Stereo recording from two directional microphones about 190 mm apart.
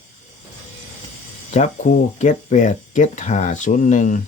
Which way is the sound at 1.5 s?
35° left (ahead or behind).